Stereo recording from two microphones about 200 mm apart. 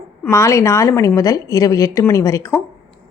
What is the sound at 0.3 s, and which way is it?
A woman's voice, 15° left (ahead or behind).